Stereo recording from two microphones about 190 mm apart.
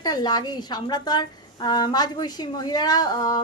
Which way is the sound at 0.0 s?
20° left (ahead or behind).